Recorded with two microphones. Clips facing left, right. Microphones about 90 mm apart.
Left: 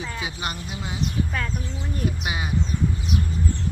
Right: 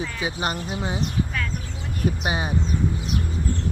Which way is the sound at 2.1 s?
35° right (ahead or behind).